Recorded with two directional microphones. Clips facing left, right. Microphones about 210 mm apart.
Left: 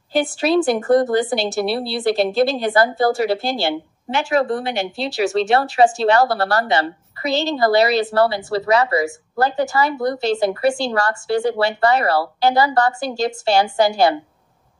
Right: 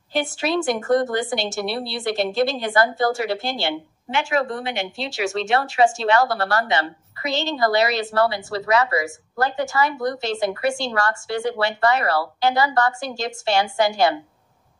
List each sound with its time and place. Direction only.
0.1 s speech: 35° left (ahead or behind)